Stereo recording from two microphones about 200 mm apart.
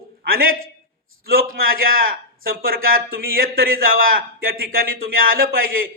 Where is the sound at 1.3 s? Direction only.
45° right (ahead or behind).